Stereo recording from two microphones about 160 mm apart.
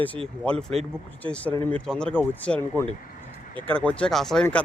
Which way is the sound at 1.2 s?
30° right (ahead or behind).